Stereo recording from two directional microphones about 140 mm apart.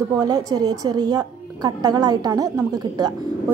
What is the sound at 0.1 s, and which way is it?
A woman's voice, 25° right (ahead or behind).